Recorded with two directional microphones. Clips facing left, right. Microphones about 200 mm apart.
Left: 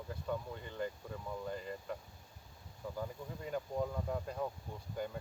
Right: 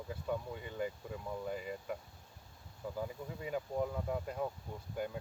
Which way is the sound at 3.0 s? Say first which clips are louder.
Right 2 dB; 5° right (ahead or behind).